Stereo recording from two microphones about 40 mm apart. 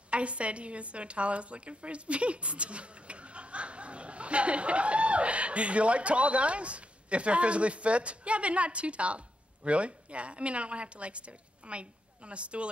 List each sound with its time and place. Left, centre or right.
0.1 s a woman's voice: right